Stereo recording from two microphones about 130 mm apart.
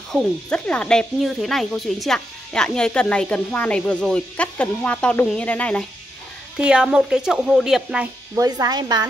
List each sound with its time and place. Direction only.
0.1 s speech: 10° left (ahead or behind)
6.6 s speech: 5° right (ahead or behind)
8.4 s speech: 30° right (ahead or behind)